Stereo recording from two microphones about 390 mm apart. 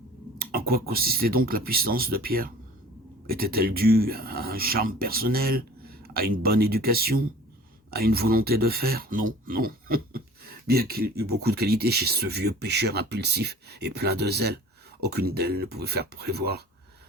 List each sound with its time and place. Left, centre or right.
0.3 s speech: right